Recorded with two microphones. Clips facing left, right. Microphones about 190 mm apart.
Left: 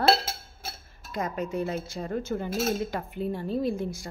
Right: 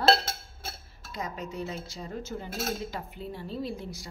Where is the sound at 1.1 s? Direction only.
55° left (ahead or behind).